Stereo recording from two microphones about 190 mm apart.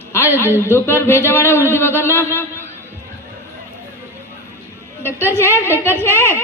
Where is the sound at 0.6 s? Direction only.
15° left (ahead or behind).